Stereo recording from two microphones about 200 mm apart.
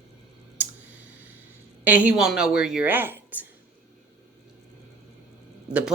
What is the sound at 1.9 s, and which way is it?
Speech, 5° right (ahead or behind).